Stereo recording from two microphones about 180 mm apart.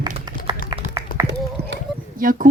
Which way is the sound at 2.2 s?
50° right (ahead or behind).